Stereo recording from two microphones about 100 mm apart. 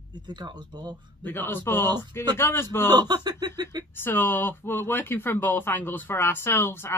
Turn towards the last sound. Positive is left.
turn(degrees=25)  # may be behind; listen again after turning